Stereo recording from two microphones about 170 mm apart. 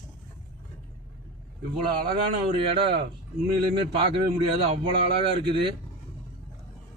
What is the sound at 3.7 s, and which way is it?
Speech, 30° right (ahead or behind).